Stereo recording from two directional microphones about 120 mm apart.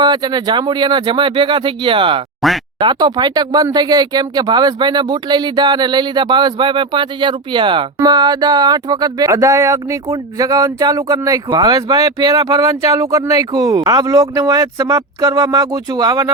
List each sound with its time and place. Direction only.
0.0 s speech: 35° right (ahead or behind)
2.4 s speech: centre (ahead or behind)
2.7 s speech: 40° right (ahead or behind)